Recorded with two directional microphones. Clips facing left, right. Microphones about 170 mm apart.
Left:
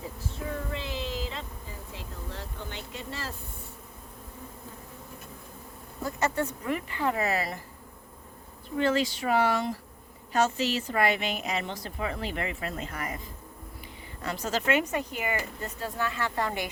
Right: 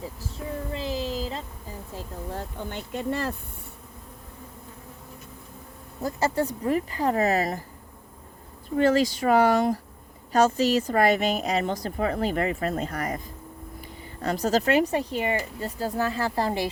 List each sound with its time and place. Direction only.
0.7 s child singing: 35° right (ahead or behind)
1.9 s a sound: 45° right (ahead or behind)
6.0 s a woman's voice: 35° right (ahead or behind)
8.7 s a woman's voice: 40° right (ahead or behind)
14.2 s a woman's voice: 40° right (ahead or behind)